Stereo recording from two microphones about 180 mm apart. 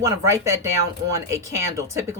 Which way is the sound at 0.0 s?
15° right (ahead or behind).